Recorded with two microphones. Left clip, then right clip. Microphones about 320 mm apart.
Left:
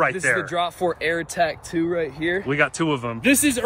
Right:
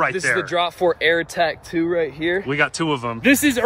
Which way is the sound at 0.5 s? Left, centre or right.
Centre.